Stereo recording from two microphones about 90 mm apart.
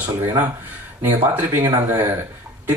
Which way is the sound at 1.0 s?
20° right (ahead or behind).